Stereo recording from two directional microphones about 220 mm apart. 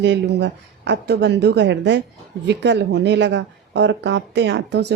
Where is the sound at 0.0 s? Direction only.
55° right (ahead or behind).